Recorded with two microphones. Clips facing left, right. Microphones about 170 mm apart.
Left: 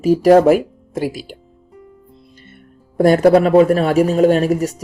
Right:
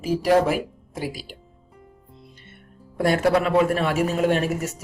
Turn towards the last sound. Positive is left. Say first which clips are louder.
# left 8 dB
turn(degrees=35)  # may be behind; listen again after turning